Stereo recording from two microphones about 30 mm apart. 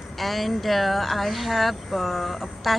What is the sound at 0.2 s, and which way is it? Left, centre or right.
Speech, centre.